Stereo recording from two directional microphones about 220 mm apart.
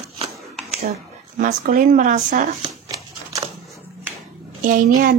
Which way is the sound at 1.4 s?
35° right (ahead or behind).